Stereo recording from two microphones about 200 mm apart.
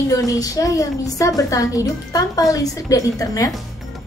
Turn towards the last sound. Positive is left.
turn(degrees=15)  # may be behind; listen again after turning